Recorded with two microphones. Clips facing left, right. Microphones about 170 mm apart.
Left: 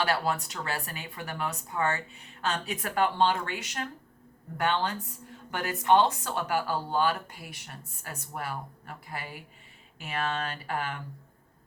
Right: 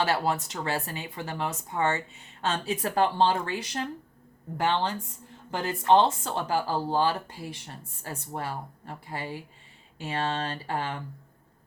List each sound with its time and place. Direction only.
0.0 s speech: 25° right (ahead or behind)